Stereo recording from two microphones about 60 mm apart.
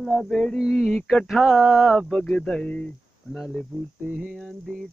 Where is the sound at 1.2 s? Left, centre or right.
Centre.